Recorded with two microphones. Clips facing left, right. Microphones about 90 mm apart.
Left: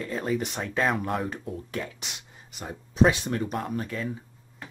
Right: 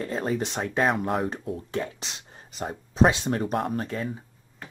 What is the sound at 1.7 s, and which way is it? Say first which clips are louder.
Speech: right 4 dB; 30° right (ahead or behind).